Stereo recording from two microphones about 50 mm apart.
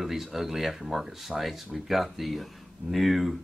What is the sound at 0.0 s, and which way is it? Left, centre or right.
Speech, centre.